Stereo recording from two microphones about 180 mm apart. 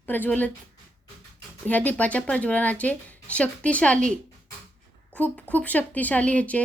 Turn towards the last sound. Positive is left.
turn(degrees=5)  # may be behind; listen again after turning